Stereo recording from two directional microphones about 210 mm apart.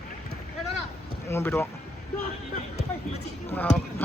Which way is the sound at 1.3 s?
10° left (ahead or behind).